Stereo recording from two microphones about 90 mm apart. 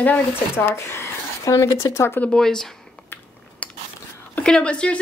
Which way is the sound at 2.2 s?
10° left (ahead or behind).